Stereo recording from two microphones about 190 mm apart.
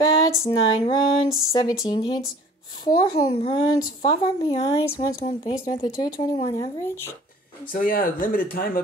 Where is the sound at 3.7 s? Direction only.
25° left (ahead or behind).